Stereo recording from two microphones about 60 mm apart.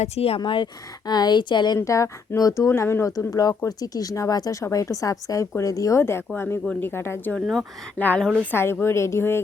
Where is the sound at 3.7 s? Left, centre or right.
Left.